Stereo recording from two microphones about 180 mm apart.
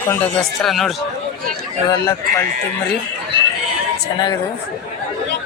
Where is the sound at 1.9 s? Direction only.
15° left (ahead or behind).